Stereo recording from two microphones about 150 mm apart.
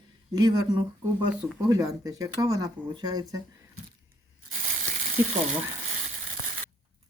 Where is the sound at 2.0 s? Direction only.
25° right (ahead or behind).